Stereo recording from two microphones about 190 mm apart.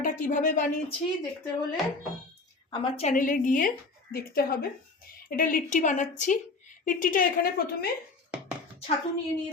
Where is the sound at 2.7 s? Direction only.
30° left (ahead or behind); by 7.5 s 45° left (ahead or behind).